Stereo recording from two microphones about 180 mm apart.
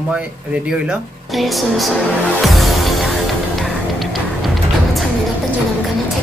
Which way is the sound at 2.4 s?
Centre (ahead or behind).